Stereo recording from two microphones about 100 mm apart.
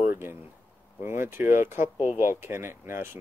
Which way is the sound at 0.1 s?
25° right (ahead or behind).